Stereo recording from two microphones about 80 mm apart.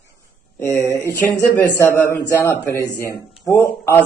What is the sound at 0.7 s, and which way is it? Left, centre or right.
A man's voice, left.